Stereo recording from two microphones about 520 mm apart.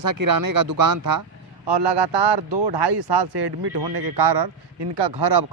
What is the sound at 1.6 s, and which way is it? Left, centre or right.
A man's voice, right.